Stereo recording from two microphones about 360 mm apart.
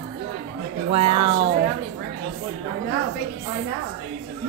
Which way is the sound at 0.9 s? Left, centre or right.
Centre.